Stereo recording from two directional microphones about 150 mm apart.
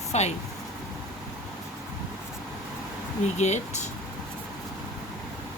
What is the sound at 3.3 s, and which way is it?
Speech, 50° left (ahead or behind).